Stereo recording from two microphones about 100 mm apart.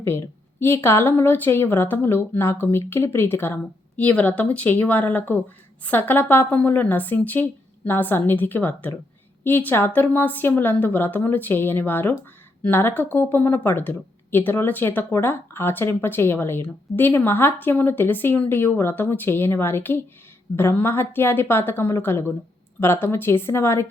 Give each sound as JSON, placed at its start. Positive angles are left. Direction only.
{"t": 0.0, "sound": "speech", "side_deg": 25}